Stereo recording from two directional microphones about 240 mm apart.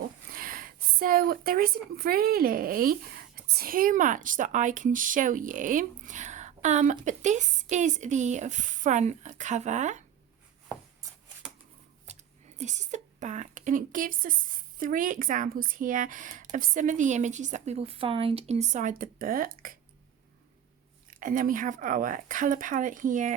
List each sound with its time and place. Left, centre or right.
0.3 s speech: right
12.5 s speech: right
21.1 s speech: right